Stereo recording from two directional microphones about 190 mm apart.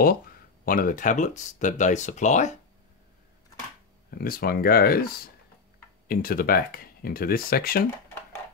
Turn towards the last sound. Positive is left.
turn(degrees=50)  # may be behind; listen again after turning